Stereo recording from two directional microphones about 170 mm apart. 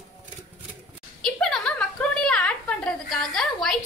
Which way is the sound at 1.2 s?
Centre (ahead or behind).